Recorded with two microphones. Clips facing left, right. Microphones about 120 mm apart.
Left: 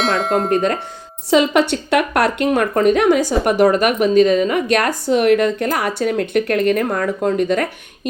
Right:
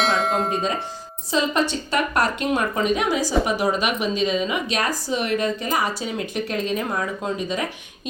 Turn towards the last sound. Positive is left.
turn(degrees=60)  # may be behind; listen again after turning